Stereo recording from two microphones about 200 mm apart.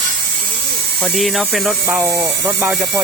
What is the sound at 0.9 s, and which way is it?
Speech, centre (ahead or behind).